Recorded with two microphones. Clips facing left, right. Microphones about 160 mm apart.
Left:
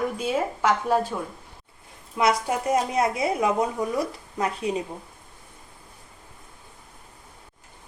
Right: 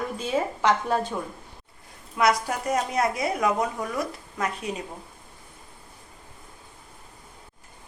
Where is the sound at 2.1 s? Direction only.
25° left (ahead or behind).